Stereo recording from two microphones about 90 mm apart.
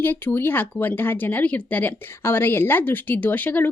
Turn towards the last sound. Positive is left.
turn(degrees=20)  # may be behind; listen again after turning